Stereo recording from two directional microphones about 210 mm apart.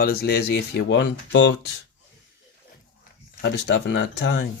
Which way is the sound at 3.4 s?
55° left (ahead or behind).